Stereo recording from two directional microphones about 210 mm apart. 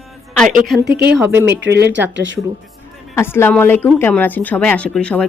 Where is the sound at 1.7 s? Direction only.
55° right (ahead or behind).